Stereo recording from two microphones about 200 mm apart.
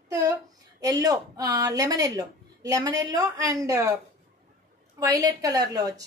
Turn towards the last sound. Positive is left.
turn(degrees=-20)  # may be behind; listen again after turning